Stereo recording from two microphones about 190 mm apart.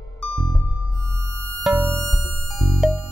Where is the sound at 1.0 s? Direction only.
15° right (ahead or behind).